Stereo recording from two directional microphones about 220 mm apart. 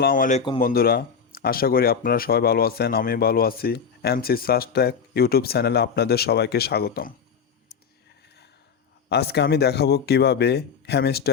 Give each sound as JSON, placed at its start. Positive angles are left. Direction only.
{"t": 0.0, "sound": "speech", "side_deg": 40}
{"t": 9.0, "sound": "speech", "side_deg": 50}